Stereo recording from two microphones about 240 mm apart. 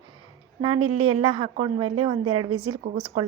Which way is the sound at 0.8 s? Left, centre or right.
Right.